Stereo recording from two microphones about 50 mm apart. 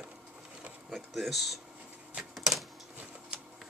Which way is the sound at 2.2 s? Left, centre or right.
Centre.